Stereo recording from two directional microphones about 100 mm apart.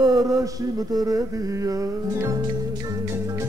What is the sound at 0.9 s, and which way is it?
Music, 35° right (ahead or behind).